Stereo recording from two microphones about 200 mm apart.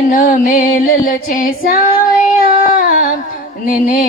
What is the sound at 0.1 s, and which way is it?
Female singing, 45° left (ahead or behind).